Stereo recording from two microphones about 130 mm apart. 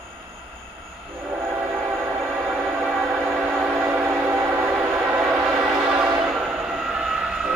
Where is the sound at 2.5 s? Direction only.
Centre (ahead or behind).